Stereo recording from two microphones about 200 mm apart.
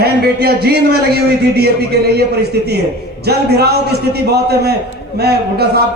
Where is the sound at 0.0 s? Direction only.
50° right (ahead or behind).